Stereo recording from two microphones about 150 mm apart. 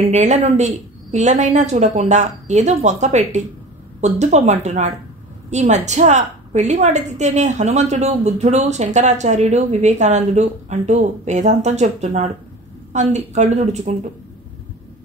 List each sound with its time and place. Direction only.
0.1 s a woman's voice: 50° right (ahead or behind)